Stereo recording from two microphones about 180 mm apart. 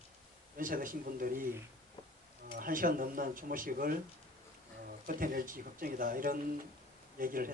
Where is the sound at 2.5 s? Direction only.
50° right (ahead or behind).